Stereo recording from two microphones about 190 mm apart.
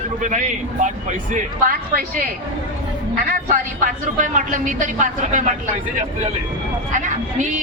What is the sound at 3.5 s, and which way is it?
Speech, 40° right (ahead or behind).